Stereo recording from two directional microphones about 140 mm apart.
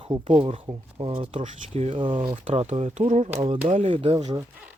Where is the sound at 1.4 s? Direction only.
55° right (ahead or behind).